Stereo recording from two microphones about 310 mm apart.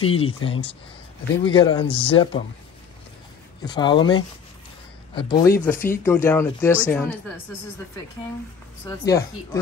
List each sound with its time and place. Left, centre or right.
0.0 s speech: centre
3.6 s speech: centre
9.0 s speech: centre